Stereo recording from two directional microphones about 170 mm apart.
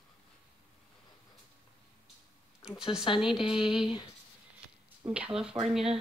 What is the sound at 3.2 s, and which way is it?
Speech, 5° right (ahead or behind).